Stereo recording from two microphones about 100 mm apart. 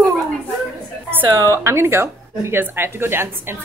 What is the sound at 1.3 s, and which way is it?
Speech, 30° right (ahead or behind).